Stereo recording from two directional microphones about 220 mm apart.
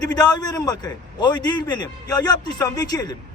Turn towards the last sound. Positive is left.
turn(degrees=15)  # may be behind; listen again after turning